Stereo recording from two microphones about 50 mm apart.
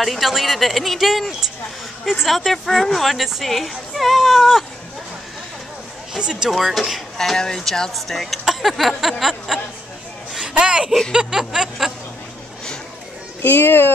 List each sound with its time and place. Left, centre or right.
0.0 s speech: centre
1.4 s a sound: centre
2.2 s speech: centre
6.1 s a sound: centre
6.5 s speech: centre
7.2 s speech: centre
10.4 s speech: centre
11.1 s a sound: centre
13.4 s speech: left